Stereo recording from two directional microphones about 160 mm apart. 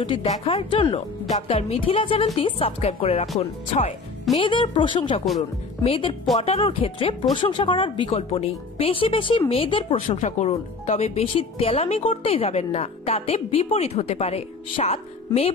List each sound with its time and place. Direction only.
0.0 s speech: 35° left (ahead or behind)
10.2 s speech: 45° left (ahead or behind)